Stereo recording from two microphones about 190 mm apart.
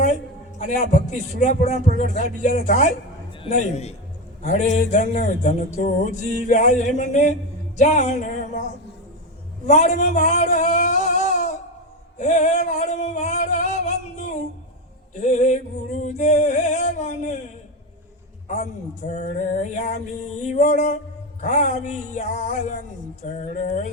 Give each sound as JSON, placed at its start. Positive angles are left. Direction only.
{"t": 0.6, "sound": "music", "side_deg": 40}
{"t": 9.6, "sound": "speech", "side_deg": 40}
{"t": 12.2, "sound": "music", "side_deg": 40}
{"t": 18.4, "sound": "music", "side_deg": 40}